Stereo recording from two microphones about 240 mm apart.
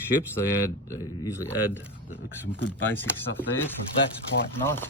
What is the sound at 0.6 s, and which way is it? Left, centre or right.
Speech, centre.